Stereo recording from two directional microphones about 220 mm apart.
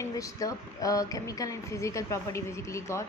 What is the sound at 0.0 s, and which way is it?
Speech, 15° left (ahead or behind).